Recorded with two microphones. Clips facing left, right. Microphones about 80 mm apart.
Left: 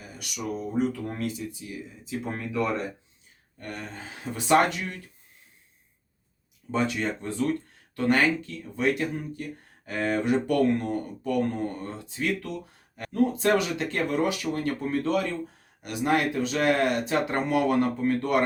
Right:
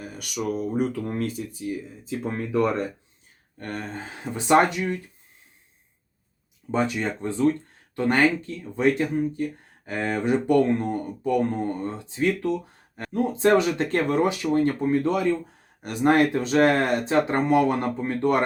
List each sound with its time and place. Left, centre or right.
0.0 s speech: right
6.7 s speech: right
15.8 s speech: right